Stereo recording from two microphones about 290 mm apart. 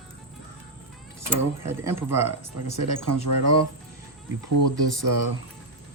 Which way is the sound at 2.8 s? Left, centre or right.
Right.